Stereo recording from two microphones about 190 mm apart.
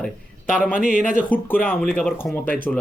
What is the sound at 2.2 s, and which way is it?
Speech, 10° left (ahead or behind).